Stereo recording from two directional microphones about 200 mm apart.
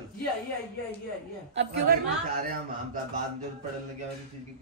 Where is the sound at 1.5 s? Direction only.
50° right (ahead or behind).